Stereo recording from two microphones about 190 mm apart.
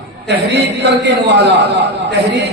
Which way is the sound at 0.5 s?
65° right (ahead or behind).